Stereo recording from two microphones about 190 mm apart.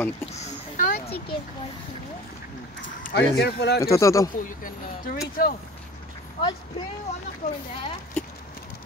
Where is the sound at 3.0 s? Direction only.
55° left (ahead or behind).